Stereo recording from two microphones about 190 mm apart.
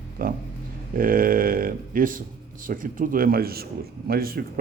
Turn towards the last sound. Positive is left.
turn(degrees=-50)  # may be behind; listen again after turning